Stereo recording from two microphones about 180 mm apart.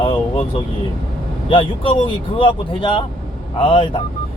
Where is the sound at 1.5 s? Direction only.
30° left (ahead or behind).